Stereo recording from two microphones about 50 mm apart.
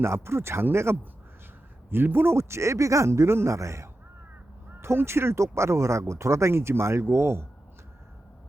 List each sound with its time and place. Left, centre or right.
0.0 s speech: right
1.9 s speech: right
4.8 s speech: right